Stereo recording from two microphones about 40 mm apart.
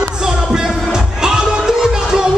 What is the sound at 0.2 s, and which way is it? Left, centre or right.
Music, centre.